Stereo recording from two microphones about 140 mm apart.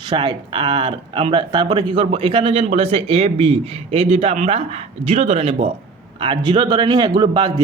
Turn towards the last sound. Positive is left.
turn(degrees=-30)  # may be behind; listen again after turning